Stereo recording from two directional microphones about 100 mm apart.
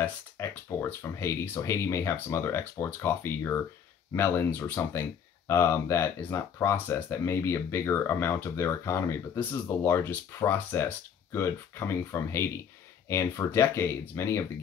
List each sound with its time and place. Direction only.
0.0 s speech: 25° left (ahead or behind)